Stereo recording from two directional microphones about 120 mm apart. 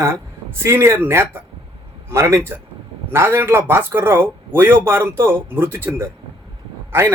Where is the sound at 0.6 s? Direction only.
20° right (ahead or behind).